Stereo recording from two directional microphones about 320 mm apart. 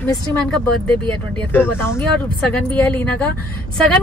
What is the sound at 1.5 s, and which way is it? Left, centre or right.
Speech, centre.